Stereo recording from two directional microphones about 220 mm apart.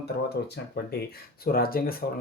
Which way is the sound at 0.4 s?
45° left (ahead or behind).